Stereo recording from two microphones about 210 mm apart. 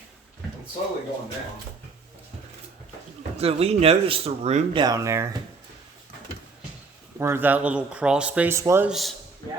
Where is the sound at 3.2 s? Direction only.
30° right (ahead or behind).